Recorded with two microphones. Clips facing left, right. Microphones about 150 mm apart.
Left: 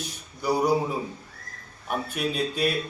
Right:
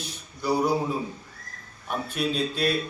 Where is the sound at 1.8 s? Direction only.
5° left (ahead or behind).